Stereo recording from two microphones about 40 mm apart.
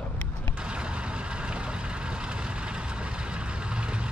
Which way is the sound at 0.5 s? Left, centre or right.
Right.